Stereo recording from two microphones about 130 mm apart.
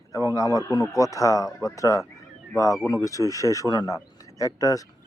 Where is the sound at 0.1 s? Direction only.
25° left (ahead or behind).